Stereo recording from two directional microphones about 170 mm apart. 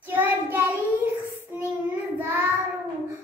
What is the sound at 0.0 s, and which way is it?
Child singing, 10° right (ahead or behind).